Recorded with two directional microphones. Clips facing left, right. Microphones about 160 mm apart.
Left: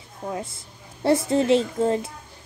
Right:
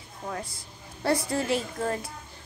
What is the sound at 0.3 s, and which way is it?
A woman's voice, 25° left (ahead or behind).